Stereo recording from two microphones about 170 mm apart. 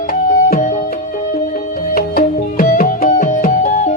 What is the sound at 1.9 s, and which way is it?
Music, 60° left (ahead or behind).